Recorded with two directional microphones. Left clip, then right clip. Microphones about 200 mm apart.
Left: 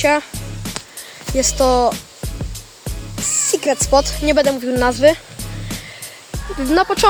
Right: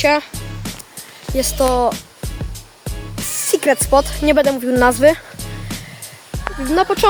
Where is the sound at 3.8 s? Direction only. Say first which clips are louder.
Right 1 dB; 10° right (ahead or behind).